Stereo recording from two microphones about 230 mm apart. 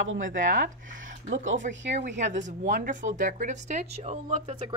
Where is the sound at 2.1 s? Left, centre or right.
Right.